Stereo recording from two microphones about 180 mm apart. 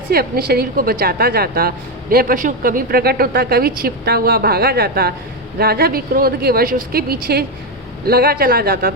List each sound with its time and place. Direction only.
0.1 s a woman's voice: 55° right (ahead or behind)